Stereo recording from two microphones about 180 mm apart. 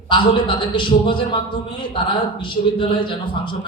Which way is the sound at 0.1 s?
25° left (ahead or behind).